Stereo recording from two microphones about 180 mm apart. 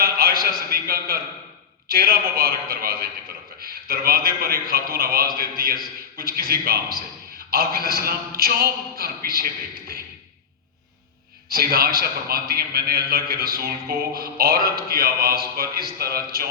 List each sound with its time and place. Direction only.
0.0 s a sound: 55° right (ahead or behind)
1.9 s speech: 55° right (ahead or behind)
11.4 s speech: 55° right (ahead or behind)